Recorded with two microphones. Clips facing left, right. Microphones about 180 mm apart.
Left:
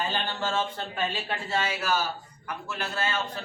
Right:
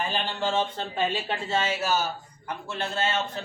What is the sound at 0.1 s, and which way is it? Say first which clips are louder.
Speech: right 2 dB; 15° right (ahead or behind).